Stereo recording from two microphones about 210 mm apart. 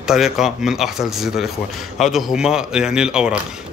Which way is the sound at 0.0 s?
Centre (ahead or behind).